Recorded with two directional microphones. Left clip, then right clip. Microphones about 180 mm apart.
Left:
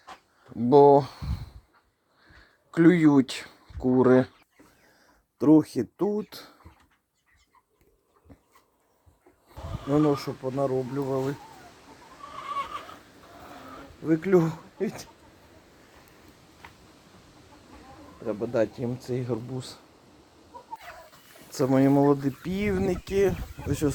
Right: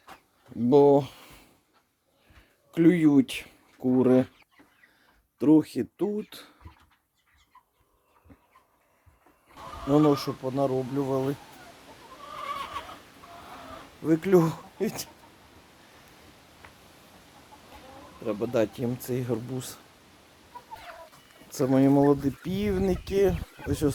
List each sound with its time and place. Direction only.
0.7 s speech: centre (ahead or behind)
2.7 s speech: centre (ahead or behind)
5.4 s speech: 10° left (ahead or behind)
8.3 s dog: 10° left (ahead or behind)
10.1 s speech: centre (ahead or behind)
14.0 s speech: 5° right (ahead or behind)
16.6 s a sound: 55° left (ahead or behind)
18.3 s speech: 5° right (ahead or behind)
21.5 s speech: 10° left (ahead or behind)